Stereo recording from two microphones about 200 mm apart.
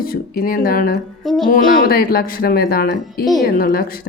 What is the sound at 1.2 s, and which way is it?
Music, centre (ahead or behind).